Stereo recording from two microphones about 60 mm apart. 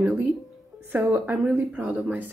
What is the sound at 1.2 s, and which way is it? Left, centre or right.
Speech, right.